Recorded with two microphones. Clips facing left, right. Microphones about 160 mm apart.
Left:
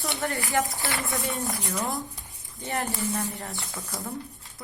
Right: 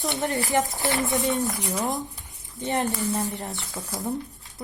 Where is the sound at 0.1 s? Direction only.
20° right (ahead or behind).